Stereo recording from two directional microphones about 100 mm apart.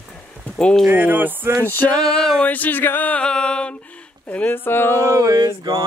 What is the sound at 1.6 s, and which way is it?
Speech, 20° left (ahead or behind).